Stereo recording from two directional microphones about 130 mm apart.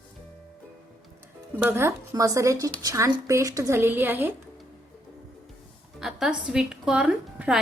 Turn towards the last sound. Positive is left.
turn(degrees=-10)  # may be behind; listen again after turning